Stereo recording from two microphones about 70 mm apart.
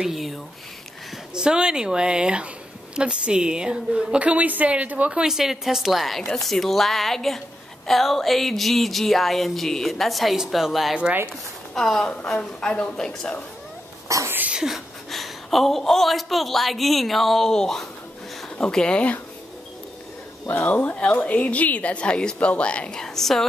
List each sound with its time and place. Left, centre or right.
0.0 s a woman's voice: centre; by 5.2 s right
5.2 s a woman's voice: centre
14.0 s speech: right
14.5 s a woman's voice: centre
20.4 s speech: left; by 23.4 s centre